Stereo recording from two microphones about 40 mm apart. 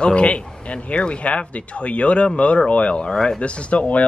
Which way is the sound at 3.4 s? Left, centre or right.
Left.